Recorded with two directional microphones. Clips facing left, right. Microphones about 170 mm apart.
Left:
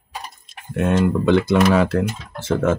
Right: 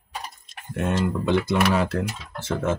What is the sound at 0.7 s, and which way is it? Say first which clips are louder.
Speech: left 6 dB; 90° left.